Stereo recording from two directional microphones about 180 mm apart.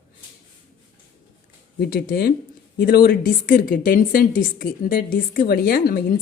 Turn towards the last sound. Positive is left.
turn(degrees=55)  # may be behind; listen again after turning